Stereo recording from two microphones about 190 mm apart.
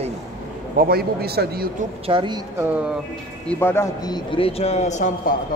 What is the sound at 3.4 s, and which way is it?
A man's voice, 10° left (ahead or behind).